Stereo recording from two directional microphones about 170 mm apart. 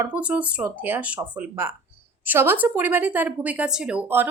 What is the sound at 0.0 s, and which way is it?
A woman's voice, 10° right (ahead or behind).